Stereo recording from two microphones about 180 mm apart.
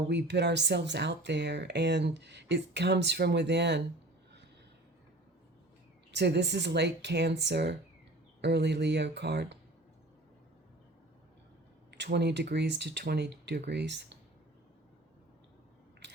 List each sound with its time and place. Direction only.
0.1 s speech: 70° right (ahead or behind)
6.1 s speech: 70° right (ahead or behind)
11.9 s speech: 70° right (ahead or behind)